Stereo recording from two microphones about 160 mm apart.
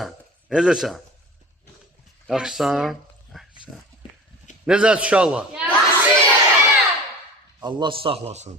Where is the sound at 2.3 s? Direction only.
5° right (ahead or behind).